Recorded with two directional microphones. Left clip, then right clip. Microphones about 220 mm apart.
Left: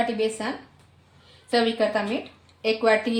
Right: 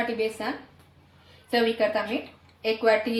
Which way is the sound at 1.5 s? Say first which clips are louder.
Left 1 dB; 30° left (ahead or behind).